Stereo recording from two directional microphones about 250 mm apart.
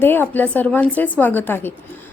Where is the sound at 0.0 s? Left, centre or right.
Centre.